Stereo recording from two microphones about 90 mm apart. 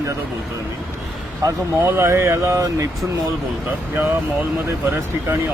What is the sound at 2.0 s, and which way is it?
Speech, 30° right (ahead or behind).